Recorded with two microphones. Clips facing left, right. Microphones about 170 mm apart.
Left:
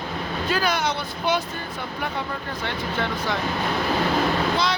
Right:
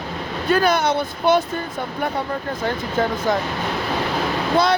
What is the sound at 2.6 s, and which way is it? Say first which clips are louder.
Speech: right 5 dB; 40° right (ahead or behind).